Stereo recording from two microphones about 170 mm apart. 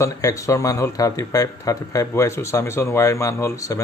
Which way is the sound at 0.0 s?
20° left (ahead or behind).